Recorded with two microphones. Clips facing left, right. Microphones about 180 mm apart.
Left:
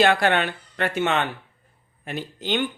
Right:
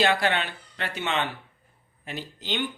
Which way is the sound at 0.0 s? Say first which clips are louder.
Left 5 dB; 55° left (ahead or behind).